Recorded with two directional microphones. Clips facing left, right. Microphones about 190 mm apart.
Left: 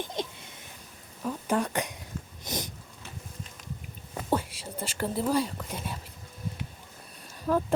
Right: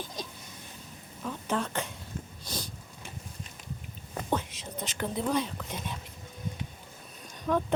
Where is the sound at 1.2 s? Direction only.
10° left (ahead or behind).